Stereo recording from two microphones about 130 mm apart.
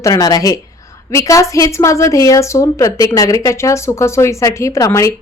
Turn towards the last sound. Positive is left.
turn(degrees=25)  # may be behind; listen again after turning